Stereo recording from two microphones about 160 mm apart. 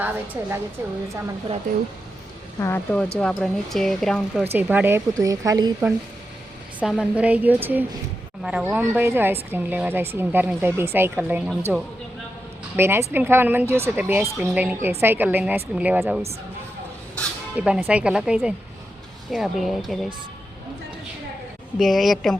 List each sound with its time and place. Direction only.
0.0 s a woman's voice: 10° right (ahead or behind)
1.7 s speech: 60° right (ahead or behind)
2.6 s speech: 15° left (ahead or behind)
4.5 s a woman's voice: 10° right (ahead or behind)
6.7 s a woman's voice: 5° right (ahead or behind)
17.6 s speech: 10° right (ahead or behind)
21.8 s speech: centre (ahead or behind)